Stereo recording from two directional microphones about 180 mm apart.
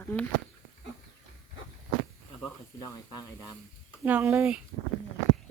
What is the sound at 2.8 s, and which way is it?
Speech, 15° left (ahead or behind).